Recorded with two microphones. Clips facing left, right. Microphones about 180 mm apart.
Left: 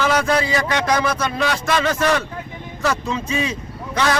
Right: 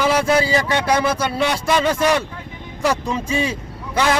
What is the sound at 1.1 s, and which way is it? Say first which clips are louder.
Speech: right 1 dB; 15° right (ahead or behind).